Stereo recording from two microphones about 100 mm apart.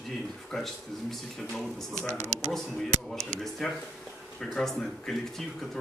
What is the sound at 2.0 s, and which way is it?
Speech, 25° right (ahead or behind).